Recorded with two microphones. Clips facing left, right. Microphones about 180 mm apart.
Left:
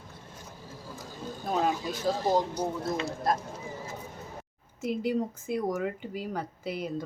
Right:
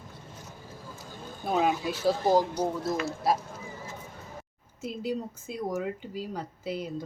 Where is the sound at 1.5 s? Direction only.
5° right (ahead or behind).